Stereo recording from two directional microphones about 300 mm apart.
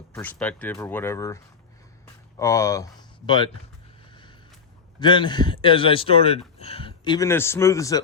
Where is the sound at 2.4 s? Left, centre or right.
Centre.